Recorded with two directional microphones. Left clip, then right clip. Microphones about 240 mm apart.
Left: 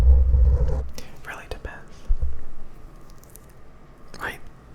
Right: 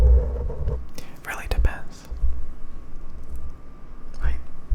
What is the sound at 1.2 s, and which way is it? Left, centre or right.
Whispering, centre.